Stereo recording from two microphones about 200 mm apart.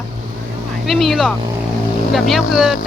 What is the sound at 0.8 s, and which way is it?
Speech, centre (ahead or behind).